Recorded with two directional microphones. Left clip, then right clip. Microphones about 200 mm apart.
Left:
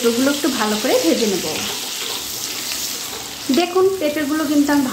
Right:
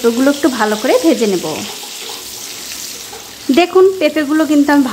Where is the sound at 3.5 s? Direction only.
35° right (ahead or behind).